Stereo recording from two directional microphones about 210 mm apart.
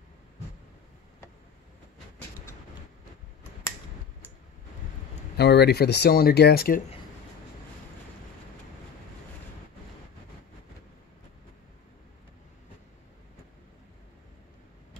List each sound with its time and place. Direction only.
5.4 s speech: 50° left (ahead or behind)